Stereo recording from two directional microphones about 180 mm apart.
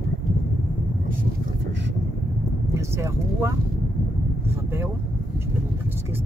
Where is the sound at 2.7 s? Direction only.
15° right (ahead or behind).